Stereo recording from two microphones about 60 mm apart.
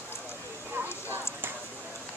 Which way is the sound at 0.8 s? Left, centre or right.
Right.